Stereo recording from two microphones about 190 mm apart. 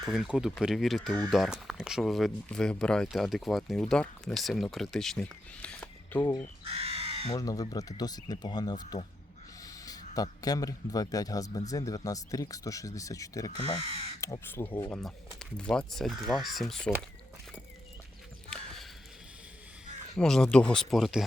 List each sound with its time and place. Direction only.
0.0 s speech: centre (ahead or behind)
6.1 s speech: 20° left (ahead or behind)
6.7 s crow: 30° right (ahead or behind)
7.3 s speech: 20° left (ahead or behind)
9.6 s a sound: 20° left (ahead or behind)
10.2 s speech: 20° left (ahead or behind)
13.8 s speech: 30° right (ahead or behind)
14.2 s speech: 15° left (ahead or behind)
18.5 s a sound: centre (ahead or behind)
20.1 s speech: 5° left (ahead or behind)